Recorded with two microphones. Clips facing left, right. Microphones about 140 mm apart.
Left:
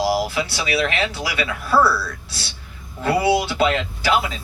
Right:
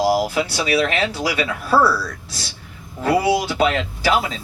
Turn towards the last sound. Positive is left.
turn(degrees=-35)  # may be behind; listen again after turning